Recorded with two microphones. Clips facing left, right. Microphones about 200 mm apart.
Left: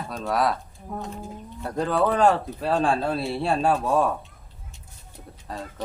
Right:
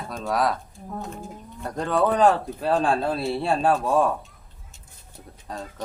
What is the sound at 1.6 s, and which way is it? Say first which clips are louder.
Speech: even; 5° left (ahead or behind).